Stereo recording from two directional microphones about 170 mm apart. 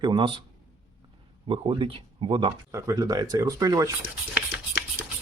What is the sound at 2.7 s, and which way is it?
Speech, 20° right (ahead or behind).